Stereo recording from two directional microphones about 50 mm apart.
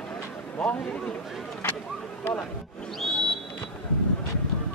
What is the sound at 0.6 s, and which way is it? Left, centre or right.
Speech, left.